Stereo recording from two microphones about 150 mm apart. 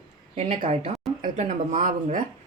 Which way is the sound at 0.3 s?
40° right (ahead or behind).